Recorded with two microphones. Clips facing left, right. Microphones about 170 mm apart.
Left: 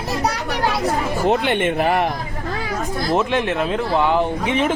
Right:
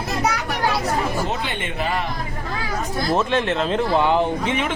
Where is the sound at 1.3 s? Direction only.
60° left (ahead or behind).